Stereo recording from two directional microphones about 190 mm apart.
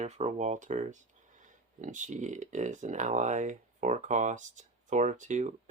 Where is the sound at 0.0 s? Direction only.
35° right (ahead or behind).